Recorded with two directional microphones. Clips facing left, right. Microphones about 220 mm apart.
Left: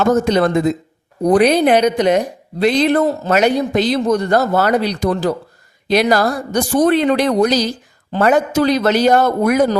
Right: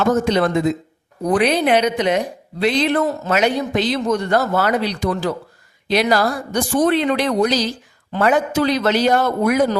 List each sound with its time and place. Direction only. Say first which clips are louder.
0.1 s a woman's voice: left 3 dB; 40° left (ahead or behind)